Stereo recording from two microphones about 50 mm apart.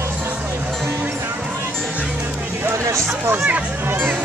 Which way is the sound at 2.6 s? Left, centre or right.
Right.